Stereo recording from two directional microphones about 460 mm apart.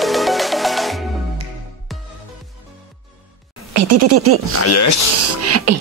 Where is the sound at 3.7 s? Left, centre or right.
Right.